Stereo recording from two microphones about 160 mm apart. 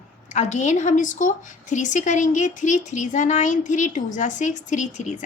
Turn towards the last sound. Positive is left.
turn(degrees=50)  # may be behind; listen again after turning